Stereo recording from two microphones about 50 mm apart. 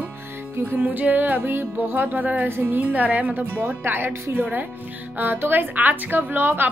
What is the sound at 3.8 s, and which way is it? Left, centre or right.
A woman's voice, right.